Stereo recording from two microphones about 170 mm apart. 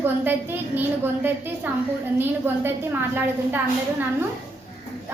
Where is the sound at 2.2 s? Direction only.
10° right (ahead or behind).